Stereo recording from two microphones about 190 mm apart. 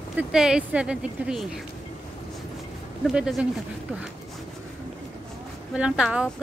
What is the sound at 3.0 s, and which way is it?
Speech, centre (ahead or behind).